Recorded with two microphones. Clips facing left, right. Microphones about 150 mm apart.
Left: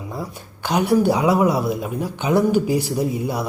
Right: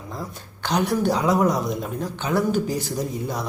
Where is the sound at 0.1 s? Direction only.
10° left (ahead or behind).